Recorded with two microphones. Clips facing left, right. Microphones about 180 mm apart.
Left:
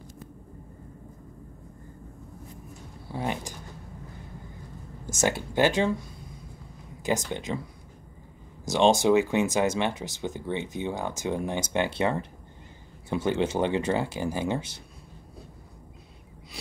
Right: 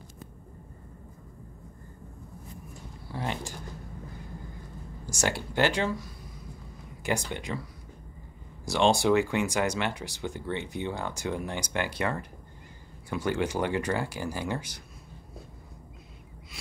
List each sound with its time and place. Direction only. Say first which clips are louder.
3.1 s a sound: left 3 dB; 20° left (ahead or behind)
5.2 s speech: left 3 dB; 20° left (ahead or behind)
7.0 s speech: left 3 dB; 20° left (ahead or behind)
8.6 s speech: left 3 dB; 20° left (ahead or behind)